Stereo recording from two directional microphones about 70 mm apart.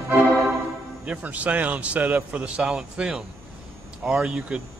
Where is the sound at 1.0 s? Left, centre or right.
Centre.